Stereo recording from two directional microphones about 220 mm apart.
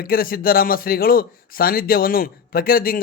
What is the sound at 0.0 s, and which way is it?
Speech, 40° left (ahead or behind).